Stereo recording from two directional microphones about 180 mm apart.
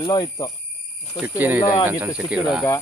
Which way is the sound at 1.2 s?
10° right (ahead or behind).